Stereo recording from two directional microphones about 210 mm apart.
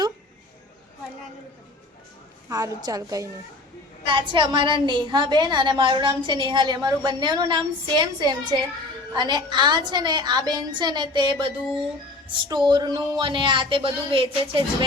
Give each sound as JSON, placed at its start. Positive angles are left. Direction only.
{"t": 2.5, "sound": "a woman's voice", "side_deg": -15}